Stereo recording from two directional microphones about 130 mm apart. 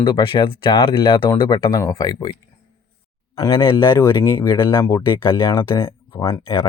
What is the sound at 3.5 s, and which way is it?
Speech, 40° left (ahead or behind).